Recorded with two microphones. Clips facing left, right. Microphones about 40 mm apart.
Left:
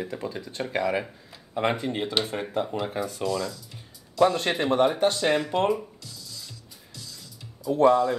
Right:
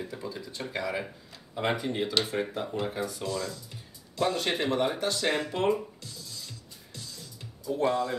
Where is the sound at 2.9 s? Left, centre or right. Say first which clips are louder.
Left 4 dB; left.